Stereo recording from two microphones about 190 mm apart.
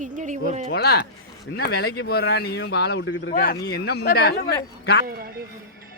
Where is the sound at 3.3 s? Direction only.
55° left (ahead or behind).